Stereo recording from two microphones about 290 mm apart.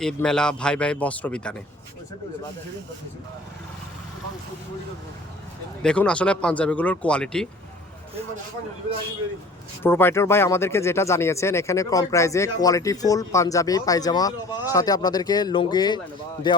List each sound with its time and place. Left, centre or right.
0.0 s speech: centre
5.8 s speech: centre
9.8 s speech: centre